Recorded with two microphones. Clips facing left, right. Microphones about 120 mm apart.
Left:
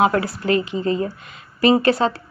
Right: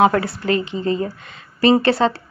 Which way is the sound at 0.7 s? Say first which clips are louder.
Even; 30° right (ahead or behind).